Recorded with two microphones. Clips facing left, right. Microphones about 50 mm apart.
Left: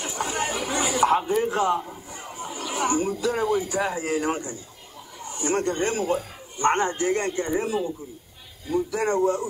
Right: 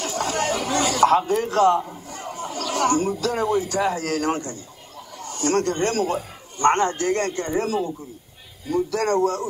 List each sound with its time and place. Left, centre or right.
0.0 s a sound: centre
2.0 s chatter: centre
3.3 s speech: centre
3.6 s a man's voice: centre